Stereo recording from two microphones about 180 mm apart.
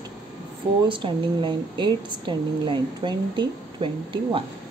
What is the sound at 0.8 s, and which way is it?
Speech, 25° right (ahead or behind).